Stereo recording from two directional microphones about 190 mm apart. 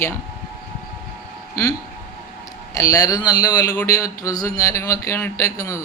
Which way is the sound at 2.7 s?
20° left (ahead or behind).